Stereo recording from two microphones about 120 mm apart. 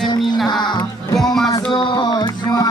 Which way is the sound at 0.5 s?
35° left (ahead or behind).